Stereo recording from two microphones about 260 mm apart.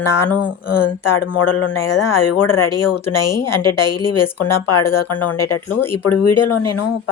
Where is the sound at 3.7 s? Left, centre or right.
Left.